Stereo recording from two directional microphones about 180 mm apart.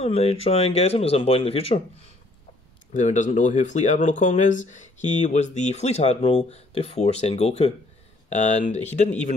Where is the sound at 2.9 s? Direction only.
45° left (ahead or behind).